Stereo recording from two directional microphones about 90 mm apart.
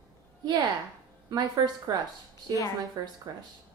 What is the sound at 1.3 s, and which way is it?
Speech, 45° right (ahead or behind).